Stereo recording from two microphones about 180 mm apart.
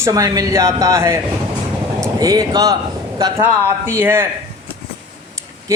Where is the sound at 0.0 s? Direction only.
20° right (ahead or behind).